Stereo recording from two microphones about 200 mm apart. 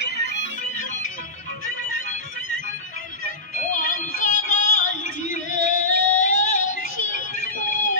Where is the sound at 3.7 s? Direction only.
45° left (ahead or behind).